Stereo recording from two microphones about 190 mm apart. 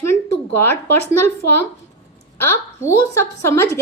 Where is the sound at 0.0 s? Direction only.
15° left (ahead or behind).